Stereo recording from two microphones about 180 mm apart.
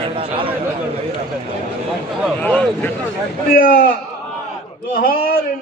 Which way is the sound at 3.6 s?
55° left (ahead or behind).